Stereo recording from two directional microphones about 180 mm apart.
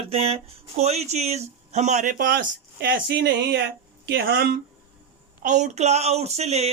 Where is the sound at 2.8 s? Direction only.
70° right (ahead or behind).